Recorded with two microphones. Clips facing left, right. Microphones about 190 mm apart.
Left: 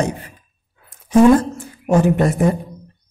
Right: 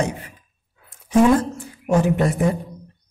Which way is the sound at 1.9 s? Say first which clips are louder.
Left 3 dB; 50° left (ahead or behind).